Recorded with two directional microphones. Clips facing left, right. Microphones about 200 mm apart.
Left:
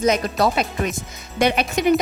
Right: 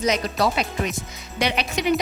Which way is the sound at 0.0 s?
50° left (ahead or behind).